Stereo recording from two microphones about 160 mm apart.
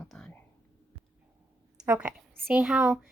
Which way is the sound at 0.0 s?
5° left (ahead or behind).